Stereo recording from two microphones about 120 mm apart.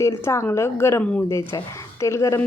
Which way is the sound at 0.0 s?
25° left (ahead or behind).